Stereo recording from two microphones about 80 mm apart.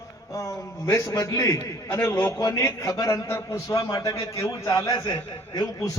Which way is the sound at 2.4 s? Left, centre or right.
Left.